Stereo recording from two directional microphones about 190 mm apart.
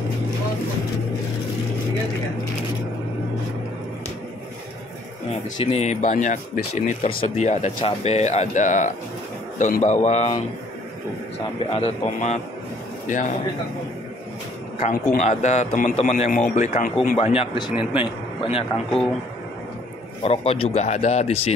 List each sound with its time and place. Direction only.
5.6 s speech: 35° left (ahead or behind)
11.7 s a man's voice: 35° left (ahead or behind)
14.8 s speech: 40° left (ahead or behind)
18.9 s speech: centre (ahead or behind)
20.2 s speech: 30° left (ahead or behind)